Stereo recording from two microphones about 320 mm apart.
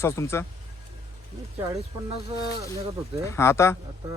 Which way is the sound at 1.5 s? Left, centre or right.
Centre.